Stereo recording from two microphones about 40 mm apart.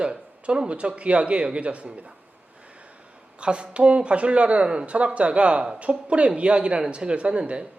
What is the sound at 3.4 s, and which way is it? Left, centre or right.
Speech, right.